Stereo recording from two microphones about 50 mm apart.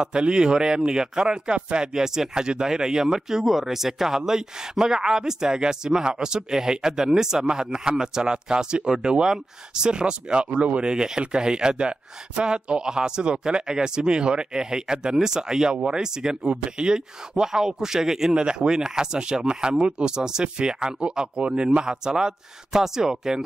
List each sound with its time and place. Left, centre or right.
0.0 s speech: centre